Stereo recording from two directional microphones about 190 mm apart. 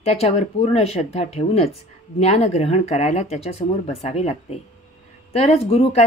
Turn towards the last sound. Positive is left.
turn(degrees=35)  # may be behind; listen again after turning